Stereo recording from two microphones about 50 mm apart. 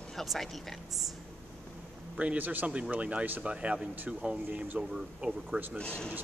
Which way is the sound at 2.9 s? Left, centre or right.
Right.